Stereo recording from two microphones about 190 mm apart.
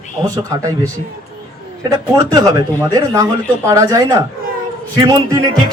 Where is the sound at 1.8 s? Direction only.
20° right (ahead or behind).